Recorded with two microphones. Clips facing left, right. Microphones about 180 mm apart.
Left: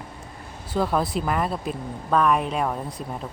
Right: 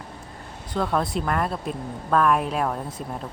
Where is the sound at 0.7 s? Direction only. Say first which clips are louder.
Left 1 dB; 5° left (ahead or behind).